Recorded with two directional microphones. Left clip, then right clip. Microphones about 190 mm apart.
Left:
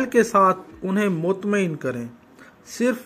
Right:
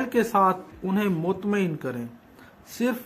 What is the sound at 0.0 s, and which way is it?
A man's voice, 15° left (ahead or behind).